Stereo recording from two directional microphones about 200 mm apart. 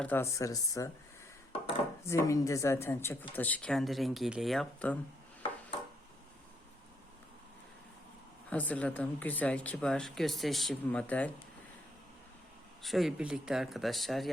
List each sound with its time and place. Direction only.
0.0 s speech: 10° left (ahead or behind)
2.0 s speech: 15° left (ahead or behind)
8.4 s speech: 5° left (ahead or behind)
12.8 s speech: centre (ahead or behind)